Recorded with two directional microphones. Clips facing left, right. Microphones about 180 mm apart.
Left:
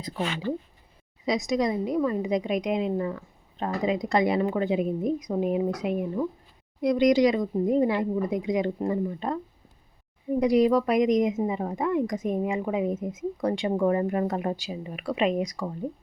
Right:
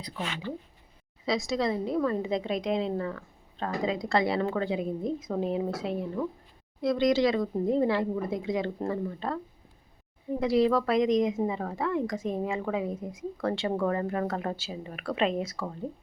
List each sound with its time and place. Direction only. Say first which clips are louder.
0.5 s speech: left 7 dB; 45° left (ahead or behind)
1.2 s a woman's voice: left 3 dB; 20° left (ahead or behind)
10.4 s a woman's voice: left 3 dB; 15° left (ahead or behind)